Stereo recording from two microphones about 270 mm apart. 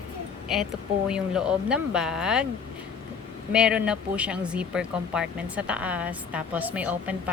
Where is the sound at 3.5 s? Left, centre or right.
Centre.